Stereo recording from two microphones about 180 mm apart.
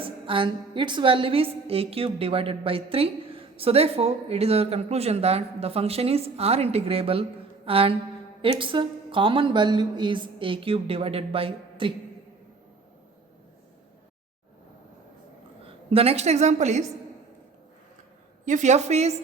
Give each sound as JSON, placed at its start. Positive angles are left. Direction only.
{"t": 0.0, "sound": "a woman's voice", "side_deg": -30}
{"t": 15.6, "sound": "a woman's voice", "side_deg": -30}
{"t": 18.4, "sound": "a woman's voice", "side_deg": -40}